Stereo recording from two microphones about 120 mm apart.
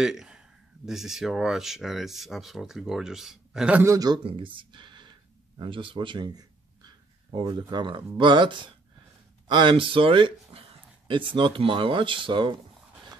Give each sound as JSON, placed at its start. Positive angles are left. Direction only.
{"t": 0.0, "sound": "speech", "side_deg": -5}
{"t": 3.8, "sound": "a man's voice", "side_deg": -30}
{"t": 4.2, "sound": "speech", "side_deg": -50}